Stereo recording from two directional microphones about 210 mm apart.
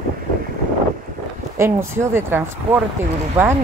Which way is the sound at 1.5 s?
10° right (ahead or behind).